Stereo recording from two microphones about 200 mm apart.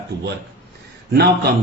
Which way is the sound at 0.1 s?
50° right (ahead or behind).